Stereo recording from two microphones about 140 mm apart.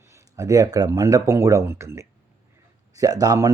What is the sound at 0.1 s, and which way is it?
Speech, 25° right (ahead or behind).